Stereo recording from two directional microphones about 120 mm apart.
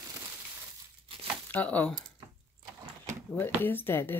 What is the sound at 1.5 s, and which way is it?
Speech, 15° left (ahead or behind).